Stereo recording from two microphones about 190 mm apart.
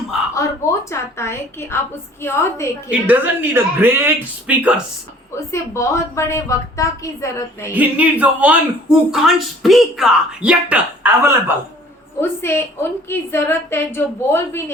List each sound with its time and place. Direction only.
0.9 s a woman's voice: 15° left (ahead or behind)
2.9 s speech: 10° right (ahead or behind)
5.5 s a woman's voice: 15° left (ahead or behind)
7.7 s speech: 10° right (ahead or behind)
12.2 s a woman's voice: 15° left (ahead or behind)